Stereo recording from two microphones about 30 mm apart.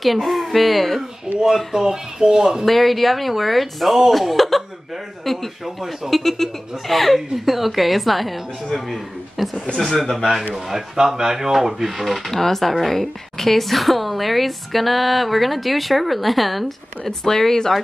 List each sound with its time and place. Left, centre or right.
0.0 s a woman's voice: centre
1.7 s speech: centre
2.6 s a woman's voice: centre
10.5 s speech: centre
12.3 s a woman's voice: centre
17.0 s speech: centre